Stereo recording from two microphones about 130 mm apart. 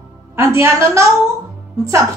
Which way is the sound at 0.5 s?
20° right (ahead or behind).